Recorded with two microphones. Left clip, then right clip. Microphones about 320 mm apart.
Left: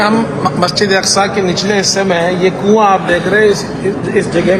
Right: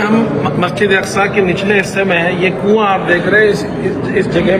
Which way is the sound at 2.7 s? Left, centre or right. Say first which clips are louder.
Left 3 dB; left.